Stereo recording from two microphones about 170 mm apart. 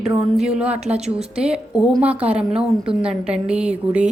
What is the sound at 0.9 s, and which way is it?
Speech, 40° right (ahead or behind).